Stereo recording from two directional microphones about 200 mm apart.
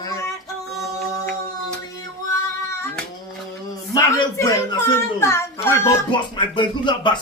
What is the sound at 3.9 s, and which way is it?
A woman's voice, 15° left (ahead or behind).